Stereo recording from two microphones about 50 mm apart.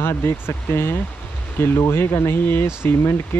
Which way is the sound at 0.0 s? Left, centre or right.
Left.